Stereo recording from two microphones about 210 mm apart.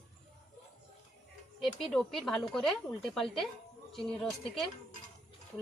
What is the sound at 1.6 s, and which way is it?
Speech, centre (ahead or behind).